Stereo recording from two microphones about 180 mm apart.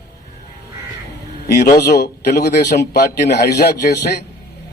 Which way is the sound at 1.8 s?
65° left (ahead or behind).